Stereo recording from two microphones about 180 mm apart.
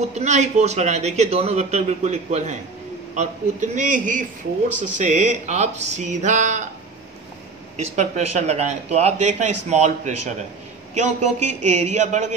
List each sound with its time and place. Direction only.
0.0 s a man's voice: 40° right (ahead or behind)
7.7 s speech: 40° right (ahead or behind)